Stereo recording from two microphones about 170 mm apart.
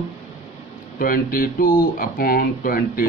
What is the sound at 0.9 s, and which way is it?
Speech, 60° left (ahead or behind).